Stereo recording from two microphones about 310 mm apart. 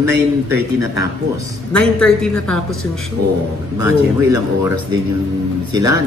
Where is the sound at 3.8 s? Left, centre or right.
Centre.